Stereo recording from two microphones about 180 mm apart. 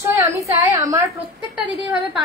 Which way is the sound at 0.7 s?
20° right (ahead or behind).